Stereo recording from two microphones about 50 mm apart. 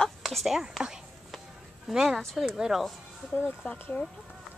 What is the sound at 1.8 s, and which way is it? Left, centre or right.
A woman's voice, centre.